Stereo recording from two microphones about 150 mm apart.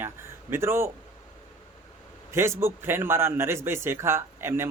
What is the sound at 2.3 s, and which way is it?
A man's voice, 15° right (ahead or behind).